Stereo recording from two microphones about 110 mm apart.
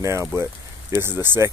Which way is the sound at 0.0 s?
25° right (ahead or behind).